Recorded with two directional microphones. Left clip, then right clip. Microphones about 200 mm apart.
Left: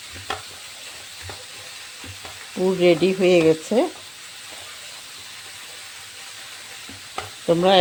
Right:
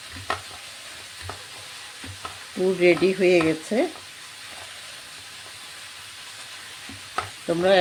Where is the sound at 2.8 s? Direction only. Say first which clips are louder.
Left 2 dB; 20° left (ahead or behind).